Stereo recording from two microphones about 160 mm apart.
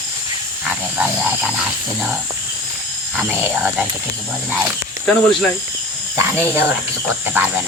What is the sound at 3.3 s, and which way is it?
Speech, 15° right (ahead or behind).